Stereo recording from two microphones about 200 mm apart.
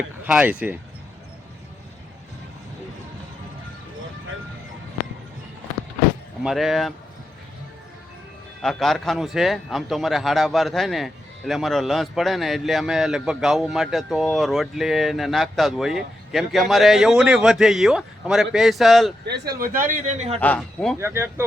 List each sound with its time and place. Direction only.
0.3 s speech: 5° right (ahead or behind)
6.4 s a man's voice: centre (ahead or behind)
8.6 s a man's voice: centre (ahead or behind)
19.2 s a man's voice: 55° right (ahead or behind); by 20.4 s 35° right (ahead or behind)
20.4 s a man's voice: 5° left (ahead or behind)
21.0 s speech: 10° right (ahead or behind)